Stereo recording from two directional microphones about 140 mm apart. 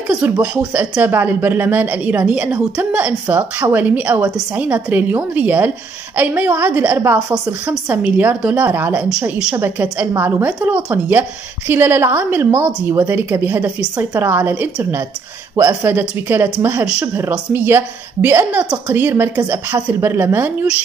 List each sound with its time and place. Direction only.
0.1 s a woman's voice: 5° right (ahead or behind)